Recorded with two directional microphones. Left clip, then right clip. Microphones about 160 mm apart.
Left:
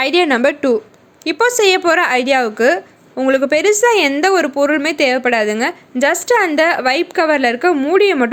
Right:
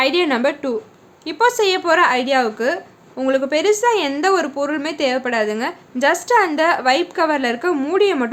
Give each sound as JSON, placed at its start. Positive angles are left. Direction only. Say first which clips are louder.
{"t": 0.0, "sound": "a woman's voice", "louder": "left 4 dB", "side_deg": 35}